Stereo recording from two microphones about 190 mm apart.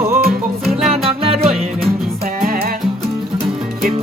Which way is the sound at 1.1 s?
30° right (ahead or behind).